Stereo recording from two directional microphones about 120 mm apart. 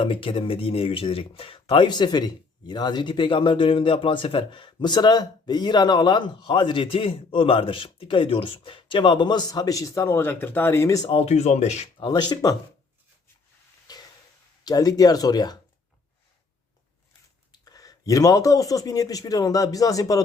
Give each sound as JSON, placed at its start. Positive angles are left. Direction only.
{"t": 0.0, "sound": "speech", "side_deg": 45}
{"t": 11.1, "sound": "speech", "side_deg": 60}
{"t": 11.9, "sound": "speech", "side_deg": 40}
{"t": 13.9, "sound": "a sound", "side_deg": 35}
{"t": 14.6, "sound": "speech", "side_deg": 30}
{"t": 17.5, "sound": "speech", "side_deg": 30}